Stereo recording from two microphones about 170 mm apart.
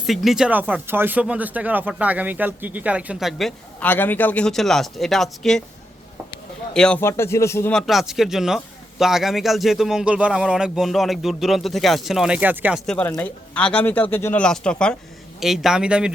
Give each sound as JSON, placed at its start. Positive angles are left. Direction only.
{"t": 0.0, "sound": "speech", "side_deg": 0}
{"t": 6.7, "sound": "speech", "side_deg": 5}
{"t": 7.0, "sound": "speech", "side_deg": 15}
{"t": 7.7, "sound": "speech", "side_deg": 0}
{"t": 12.8, "sound": "speech", "side_deg": 5}